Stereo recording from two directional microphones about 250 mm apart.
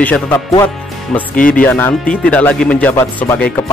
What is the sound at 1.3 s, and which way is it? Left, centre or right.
Speech, left.